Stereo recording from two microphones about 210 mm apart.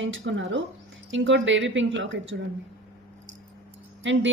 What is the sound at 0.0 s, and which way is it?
Speech, 60° right (ahead or behind).